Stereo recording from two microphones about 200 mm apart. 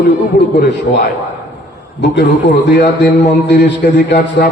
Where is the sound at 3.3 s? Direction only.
60° left (ahead or behind).